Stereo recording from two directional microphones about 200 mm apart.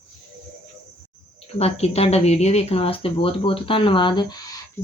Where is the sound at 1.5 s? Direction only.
30° left (ahead or behind).